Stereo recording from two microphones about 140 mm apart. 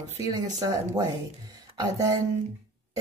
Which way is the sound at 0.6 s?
30° right (ahead or behind).